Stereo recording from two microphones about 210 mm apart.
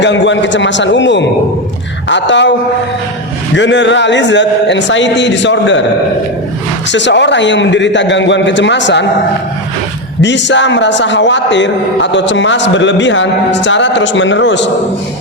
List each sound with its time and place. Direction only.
0.0 s a man's voice: 60° left (ahead or behind)
3.5 s a man's voice: 60° left (ahead or behind)
6.9 s a man's voice: 60° left (ahead or behind)
10.2 s a man's voice: 55° left (ahead or behind)